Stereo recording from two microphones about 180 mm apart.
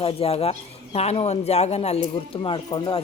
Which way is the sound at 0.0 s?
30° left (ahead or behind).